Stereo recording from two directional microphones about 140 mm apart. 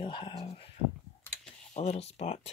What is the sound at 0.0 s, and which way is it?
Speech, 35° left (ahead or behind).